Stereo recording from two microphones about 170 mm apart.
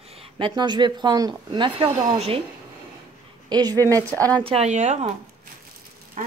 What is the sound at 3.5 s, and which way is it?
Speech, 25° right (ahead or behind).